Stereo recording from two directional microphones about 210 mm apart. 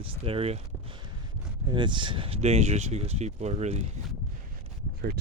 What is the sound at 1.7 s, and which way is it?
Speech, 20° right (ahead or behind).